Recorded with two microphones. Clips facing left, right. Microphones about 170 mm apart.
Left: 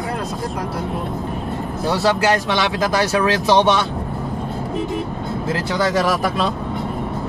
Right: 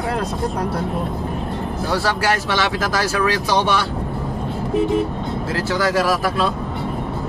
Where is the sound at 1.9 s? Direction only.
20° left (ahead or behind).